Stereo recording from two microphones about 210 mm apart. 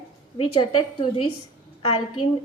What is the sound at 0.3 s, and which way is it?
Speech, 25° left (ahead or behind).